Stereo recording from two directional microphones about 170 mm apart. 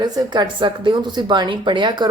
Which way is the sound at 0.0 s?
25° right (ahead or behind).